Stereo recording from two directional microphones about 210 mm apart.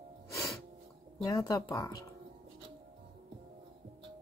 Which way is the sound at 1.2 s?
15° left (ahead or behind).